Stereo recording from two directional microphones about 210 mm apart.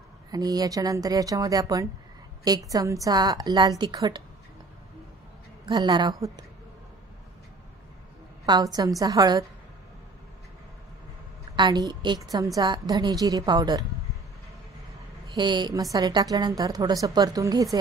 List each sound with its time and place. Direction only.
0.3 s a woman's voice: 20° right (ahead or behind)
5.7 s a woman's voice: 20° right (ahead or behind)
8.5 s a woman's voice: 20° right (ahead or behind)
11.5 s a woman's voice: 20° right (ahead or behind)
15.3 s a woman's voice: 20° right (ahead or behind)